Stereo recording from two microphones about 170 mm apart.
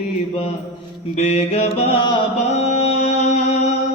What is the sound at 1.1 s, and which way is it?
Mantra, 40° left (ahead or behind).